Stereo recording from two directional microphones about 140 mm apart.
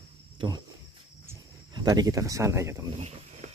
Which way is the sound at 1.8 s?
25° right (ahead or behind).